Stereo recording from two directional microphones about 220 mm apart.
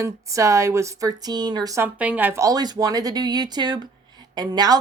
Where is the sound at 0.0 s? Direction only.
15° right (ahead or behind).